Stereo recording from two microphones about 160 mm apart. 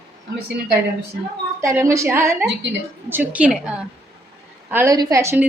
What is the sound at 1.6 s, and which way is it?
A woman's voice, 20° right (ahead or behind).